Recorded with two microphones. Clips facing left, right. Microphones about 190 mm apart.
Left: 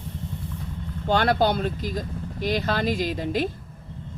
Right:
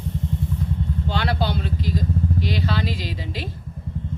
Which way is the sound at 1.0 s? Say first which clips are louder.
Left 6 dB; 50° left (ahead or behind).